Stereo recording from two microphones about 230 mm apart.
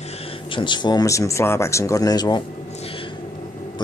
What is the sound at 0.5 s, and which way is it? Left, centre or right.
Speech, centre.